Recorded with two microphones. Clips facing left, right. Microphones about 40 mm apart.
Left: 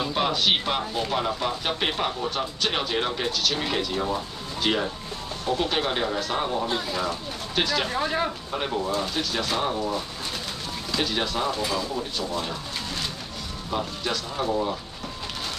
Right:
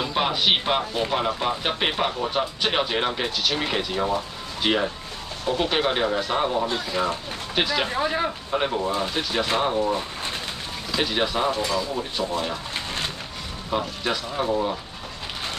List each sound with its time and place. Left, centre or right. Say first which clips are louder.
0.0 s speech: right 1 dB; centre
11.0 s speech: right 3 dB; centre
12.7 s a sound: right 2 dB; right
13.7 s speech: right 3 dB; centre